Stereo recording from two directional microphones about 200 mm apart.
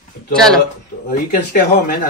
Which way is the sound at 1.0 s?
50° left (ahead or behind).